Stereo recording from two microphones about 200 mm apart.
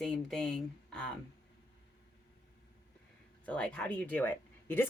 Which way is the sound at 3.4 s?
5° left (ahead or behind).